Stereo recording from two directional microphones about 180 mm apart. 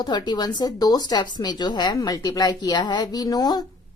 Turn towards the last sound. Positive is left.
turn(degrees=20)  # may be behind; listen again after turning